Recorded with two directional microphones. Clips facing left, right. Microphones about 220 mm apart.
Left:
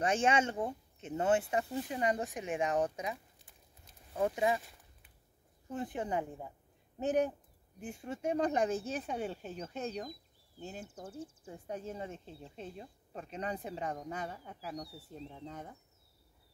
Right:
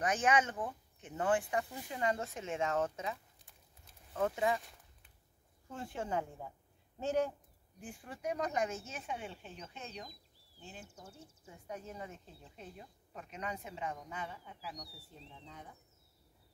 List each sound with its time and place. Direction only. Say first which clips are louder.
0.0 s speech: left 2 dB; 25° left (ahead or behind)
5.7 s a woman's voice: left 3 dB; 20° left (ahead or behind); by 11.1 s 50° left (ahead or behind)
11.4 s a woman's voice: left 3 dB; 30° left (ahead or behind); by 15.7 s 50° left (ahead or behind)